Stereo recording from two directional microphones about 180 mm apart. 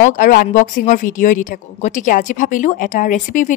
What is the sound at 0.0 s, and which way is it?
A woman's voice, 50° left (ahead or behind).